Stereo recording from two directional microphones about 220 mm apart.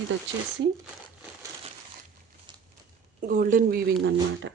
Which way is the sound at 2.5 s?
20° right (ahead or behind).